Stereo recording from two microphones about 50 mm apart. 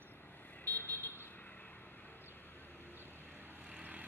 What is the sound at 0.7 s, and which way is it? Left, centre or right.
Vehicle, left.